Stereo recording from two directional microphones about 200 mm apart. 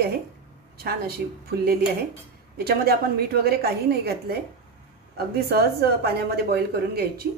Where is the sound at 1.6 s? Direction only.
50° right (ahead or behind).